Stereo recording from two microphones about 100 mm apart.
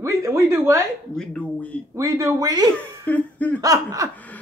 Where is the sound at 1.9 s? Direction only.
30° right (ahead or behind).